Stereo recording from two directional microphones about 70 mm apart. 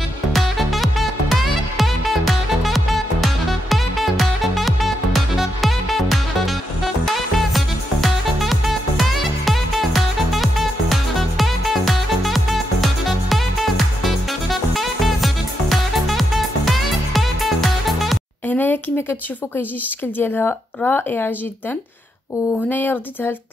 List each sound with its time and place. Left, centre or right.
0.3 s music: centre
18.5 s a sound: left
20.2 s speech: left
22.7 s speech: left